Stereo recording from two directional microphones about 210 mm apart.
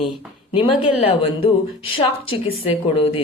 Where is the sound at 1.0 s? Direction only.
25° left (ahead or behind).